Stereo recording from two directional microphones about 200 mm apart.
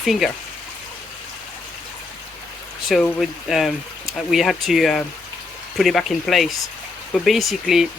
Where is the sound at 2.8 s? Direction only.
Centre (ahead or behind).